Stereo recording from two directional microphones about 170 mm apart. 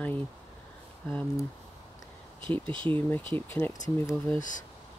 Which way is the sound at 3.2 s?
30° right (ahead or behind).